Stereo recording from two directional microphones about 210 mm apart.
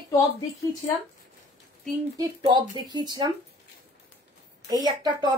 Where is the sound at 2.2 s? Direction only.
20° right (ahead or behind).